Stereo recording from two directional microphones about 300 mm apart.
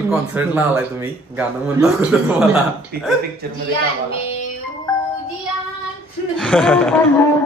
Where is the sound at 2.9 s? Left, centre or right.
Right.